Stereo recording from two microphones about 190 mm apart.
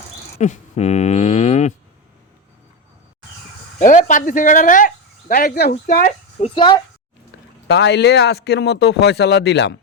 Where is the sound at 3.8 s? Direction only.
40° left (ahead or behind).